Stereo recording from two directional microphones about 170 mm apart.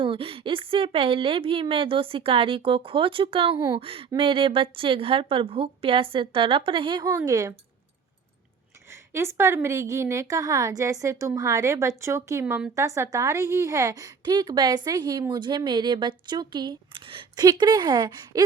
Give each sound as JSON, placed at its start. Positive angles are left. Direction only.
{"t": 0.0, "sound": "a woman's voice", "side_deg": -30}
{"t": 8.9, "sound": "a woman's voice", "side_deg": -15}